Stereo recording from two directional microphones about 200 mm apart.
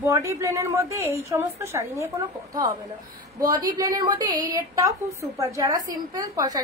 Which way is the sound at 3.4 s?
20° right (ahead or behind).